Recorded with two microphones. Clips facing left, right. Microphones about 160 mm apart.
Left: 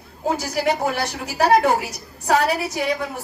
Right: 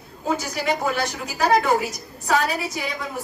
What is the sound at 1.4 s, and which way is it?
A woman's voice, 65° left (ahead or behind).